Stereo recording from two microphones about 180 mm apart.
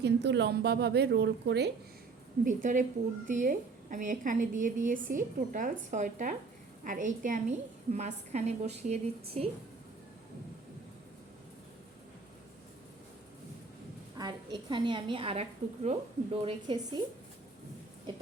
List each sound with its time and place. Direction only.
0.0 s a woman's voice: 75° right (ahead or behind)
2.4 s a woman's voice: 45° right (ahead or behind)
14.2 s a woman's voice: 25° right (ahead or behind)